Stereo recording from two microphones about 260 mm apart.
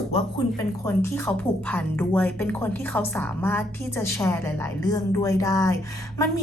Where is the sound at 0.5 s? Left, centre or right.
Centre.